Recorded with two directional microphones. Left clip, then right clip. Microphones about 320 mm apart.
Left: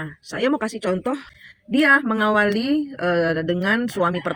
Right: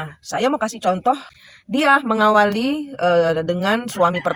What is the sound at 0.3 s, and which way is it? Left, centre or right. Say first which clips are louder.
Speech: right 3 dB; centre.